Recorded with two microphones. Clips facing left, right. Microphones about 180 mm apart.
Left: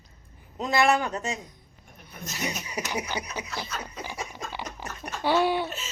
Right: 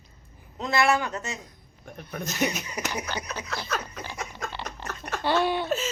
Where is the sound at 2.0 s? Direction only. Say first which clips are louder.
Right 7 dB; 70° right (ahead or behind).